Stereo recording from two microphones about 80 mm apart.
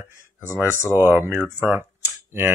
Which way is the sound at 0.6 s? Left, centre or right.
Left.